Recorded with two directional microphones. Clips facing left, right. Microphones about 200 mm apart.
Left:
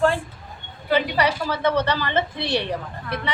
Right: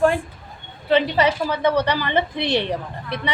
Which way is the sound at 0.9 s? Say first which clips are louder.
Right 3 dB; 20° right (ahead or behind).